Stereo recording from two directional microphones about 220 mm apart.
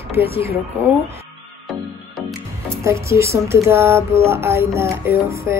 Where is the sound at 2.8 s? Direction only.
15° right (ahead or behind).